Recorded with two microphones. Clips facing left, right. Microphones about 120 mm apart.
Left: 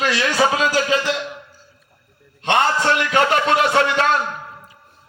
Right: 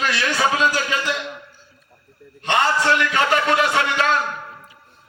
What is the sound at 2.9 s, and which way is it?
A man's voice, 30° left (ahead or behind).